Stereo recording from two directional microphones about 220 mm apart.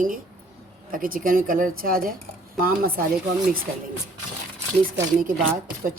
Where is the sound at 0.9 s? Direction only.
40° right (ahead or behind).